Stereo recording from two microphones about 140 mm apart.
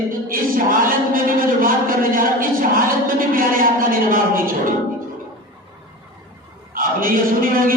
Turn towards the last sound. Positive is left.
turn(degrees=-85)